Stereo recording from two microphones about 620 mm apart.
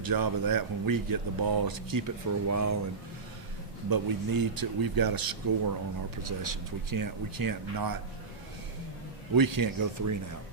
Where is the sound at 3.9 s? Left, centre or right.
Right.